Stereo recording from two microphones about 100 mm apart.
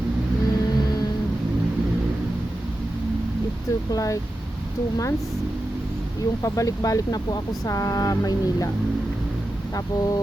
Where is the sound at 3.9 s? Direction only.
35° left (ahead or behind).